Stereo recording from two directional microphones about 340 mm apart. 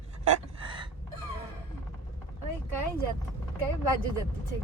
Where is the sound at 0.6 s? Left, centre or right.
Centre.